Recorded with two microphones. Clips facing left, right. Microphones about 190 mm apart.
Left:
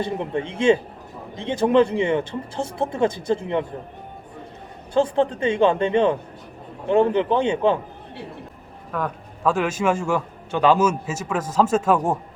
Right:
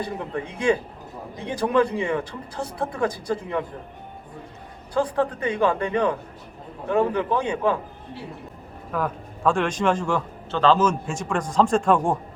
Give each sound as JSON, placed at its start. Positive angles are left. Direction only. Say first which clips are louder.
{"t": 0.0, "sound": "speech", "louder": "left 4 dB", "side_deg": 25}
{"t": 4.9, "sound": "speech", "louder": "left 3 dB", "side_deg": 25}
{"t": 8.9, "sound": "a man's voice", "louder": "even", "side_deg": 0}